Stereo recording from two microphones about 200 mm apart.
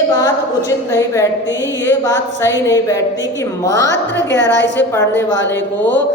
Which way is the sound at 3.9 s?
60° left (ahead or behind).